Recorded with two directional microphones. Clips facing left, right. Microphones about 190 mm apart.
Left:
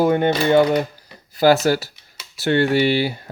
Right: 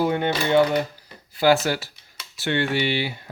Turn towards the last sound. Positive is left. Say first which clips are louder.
# left 7 dB
turn(degrees=40)  # may be behind; listen again after turning